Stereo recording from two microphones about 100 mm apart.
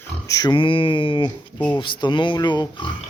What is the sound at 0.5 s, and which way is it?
Speech, 60° left (ahead or behind).